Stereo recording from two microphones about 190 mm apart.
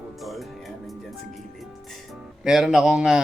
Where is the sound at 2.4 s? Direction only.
Centre (ahead or behind).